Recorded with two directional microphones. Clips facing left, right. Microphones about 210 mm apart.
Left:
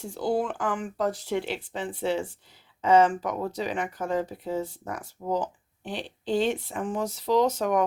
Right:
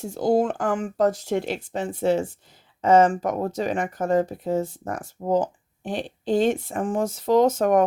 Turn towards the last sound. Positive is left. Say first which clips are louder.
# right 5 dB
turn(degrees=-50)  # may be behind; listen again after turning